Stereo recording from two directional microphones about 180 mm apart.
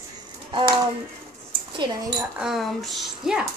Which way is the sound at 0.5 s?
25° right (ahead or behind).